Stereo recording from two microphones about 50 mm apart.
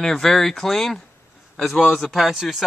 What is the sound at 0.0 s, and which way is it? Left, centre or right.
A man's voice, centre.